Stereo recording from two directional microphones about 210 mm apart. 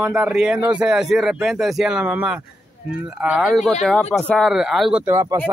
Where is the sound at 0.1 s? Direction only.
5° right (ahead or behind).